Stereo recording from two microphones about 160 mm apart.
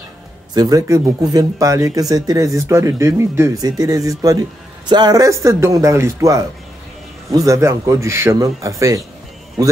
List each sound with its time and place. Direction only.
0.6 s speech: 20° right (ahead or behind)